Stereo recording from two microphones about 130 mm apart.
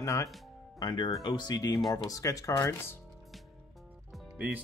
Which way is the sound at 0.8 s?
35° left (ahead or behind).